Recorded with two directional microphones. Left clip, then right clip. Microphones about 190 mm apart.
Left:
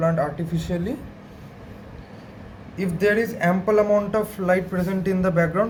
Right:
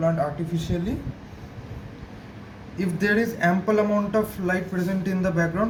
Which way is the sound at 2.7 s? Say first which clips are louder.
Left 3 dB; 55° left (ahead or behind).